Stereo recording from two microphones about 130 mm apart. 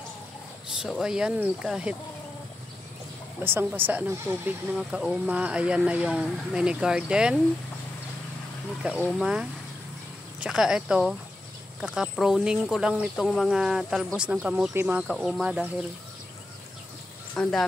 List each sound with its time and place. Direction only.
0.7 s speech: centre (ahead or behind)
3.4 s speech: 15° right (ahead or behind)
8.8 s speech: 10° right (ahead or behind)
15.0 s speech: centre (ahead or behind)
17.4 s speech: 5° left (ahead or behind)